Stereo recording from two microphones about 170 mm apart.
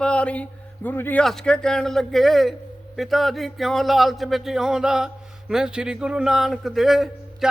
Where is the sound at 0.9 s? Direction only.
10° left (ahead or behind).